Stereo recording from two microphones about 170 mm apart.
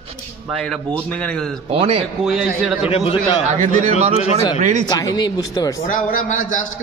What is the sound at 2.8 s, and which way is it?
Speech, 35° left (ahead or behind).